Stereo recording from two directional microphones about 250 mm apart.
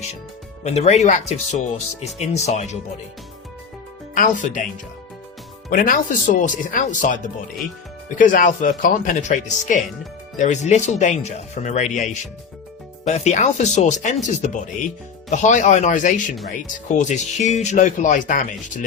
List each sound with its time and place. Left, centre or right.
0.6 s speech: left
4.1 s speech: left
5.7 s speech: left